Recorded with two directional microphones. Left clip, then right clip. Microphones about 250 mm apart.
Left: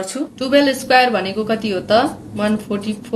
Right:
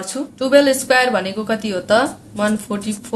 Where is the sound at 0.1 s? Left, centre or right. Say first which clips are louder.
Right 3 dB; right.